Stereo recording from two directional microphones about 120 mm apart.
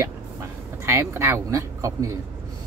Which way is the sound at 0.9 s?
25° right (ahead or behind).